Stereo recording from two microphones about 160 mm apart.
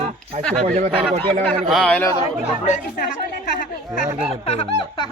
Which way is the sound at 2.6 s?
45° left (ahead or behind).